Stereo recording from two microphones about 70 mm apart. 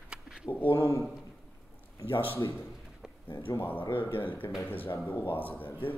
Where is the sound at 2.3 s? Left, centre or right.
Left.